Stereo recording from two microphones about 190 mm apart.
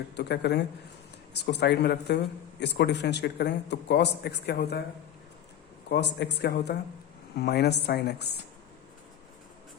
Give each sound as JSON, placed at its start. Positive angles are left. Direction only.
{"t": 0.2, "sound": "speech", "side_deg": 60}
{"t": 5.9, "sound": "speech", "side_deg": 65}